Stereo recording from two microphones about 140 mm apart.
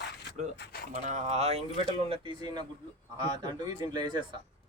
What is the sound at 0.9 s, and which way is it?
Speech, 60° right (ahead or behind).